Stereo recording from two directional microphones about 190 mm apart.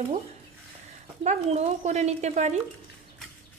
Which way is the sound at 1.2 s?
35° right (ahead or behind).